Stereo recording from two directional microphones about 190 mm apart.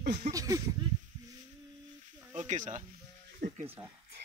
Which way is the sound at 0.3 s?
20° right (ahead or behind).